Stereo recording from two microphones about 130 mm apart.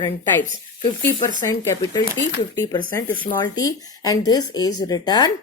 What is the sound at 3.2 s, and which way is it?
A woman's voice, 30° left (ahead or behind).